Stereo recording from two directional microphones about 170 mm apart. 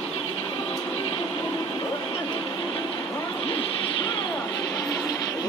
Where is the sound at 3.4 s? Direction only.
30° left (ahead or behind).